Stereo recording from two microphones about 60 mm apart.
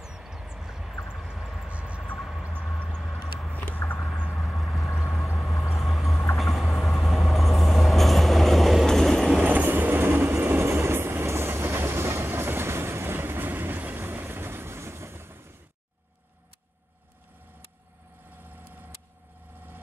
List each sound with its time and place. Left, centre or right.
0.0 s vehicle: centre
1.7 s vehicle: centre
2.1 s train: centre
3.7 s vehicle: left
4.3 s vehicle: centre
5.4 s train: centre
9.4 s train: right